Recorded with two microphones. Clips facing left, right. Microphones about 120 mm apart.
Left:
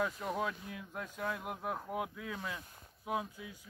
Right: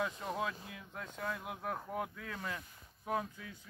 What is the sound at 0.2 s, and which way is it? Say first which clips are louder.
Speech: left 2 dB; centre (ahead or behind).